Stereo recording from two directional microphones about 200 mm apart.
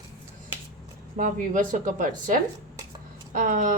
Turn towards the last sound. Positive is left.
turn(degrees=-40)  # may be behind; listen again after turning